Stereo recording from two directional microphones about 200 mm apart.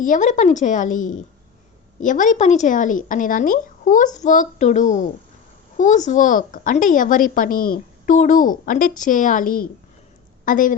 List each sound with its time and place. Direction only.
0.0 s a child's voice: 40° left (ahead or behind)